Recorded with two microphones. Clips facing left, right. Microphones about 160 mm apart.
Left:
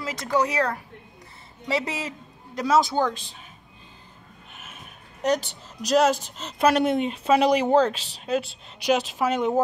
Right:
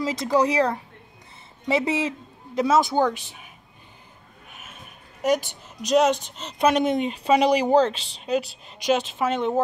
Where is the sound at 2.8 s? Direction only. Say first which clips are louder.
Right 2 dB; 15° right (ahead or behind).